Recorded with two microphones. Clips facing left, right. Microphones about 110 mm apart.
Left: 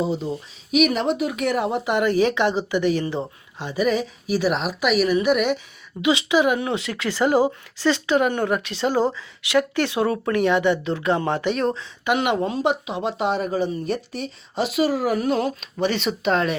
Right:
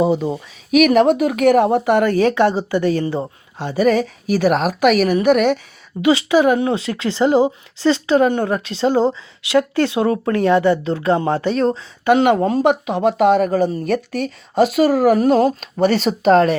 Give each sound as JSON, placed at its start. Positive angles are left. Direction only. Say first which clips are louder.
{"t": 0.0, "sound": "speech", "louder": "right 7 dB", "side_deg": -55}